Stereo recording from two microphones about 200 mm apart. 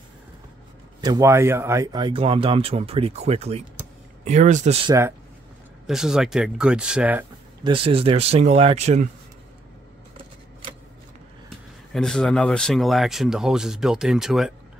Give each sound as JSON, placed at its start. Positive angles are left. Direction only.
{"t": 1.0, "sound": "speech", "side_deg": -15}
{"t": 5.9, "sound": "speech", "side_deg": 0}
{"t": 7.6, "sound": "speech", "side_deg": -25}
{"t": 11.9, "sound": "speech", "side_deg": 5}